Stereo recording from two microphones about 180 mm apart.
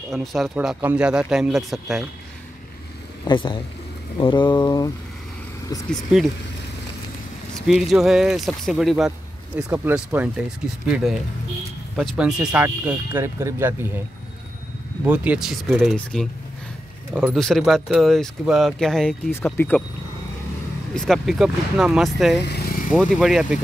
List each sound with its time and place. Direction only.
0.1 s speech: centre (ahead or behind)
3.3 s mantra: 25° left (ahead or behind)
7.6 s speech: centre (ahead or behind)
15.0 s speech: 5° right (ahead or behind); by 19.8 s 10° left (ahead or behind)
20.9 s speech: 5° left (ahead or behind)
22.5 s vehicle: 60° left (ahead or behind)
22.8 s speech: 5° right (ahead or behind)